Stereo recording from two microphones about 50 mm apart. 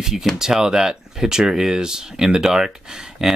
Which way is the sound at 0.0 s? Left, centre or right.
Centre.